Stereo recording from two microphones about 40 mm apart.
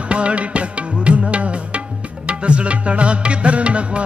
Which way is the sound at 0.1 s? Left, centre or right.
Right.